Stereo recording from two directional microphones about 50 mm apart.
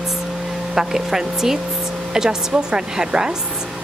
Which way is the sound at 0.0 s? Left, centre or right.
Centre.